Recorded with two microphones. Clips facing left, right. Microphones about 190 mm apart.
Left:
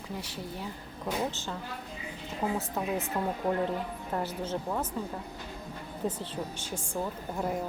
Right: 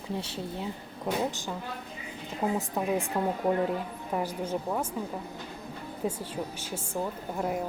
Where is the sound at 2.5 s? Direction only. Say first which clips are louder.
Right 3 dB; 15° right (ahead or behind).